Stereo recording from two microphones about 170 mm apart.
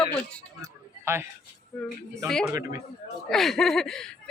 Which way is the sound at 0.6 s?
15° right (ahead or behind).